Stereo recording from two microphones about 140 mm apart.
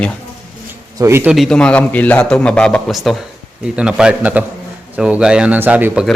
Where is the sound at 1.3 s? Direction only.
Centre (ahead or behind).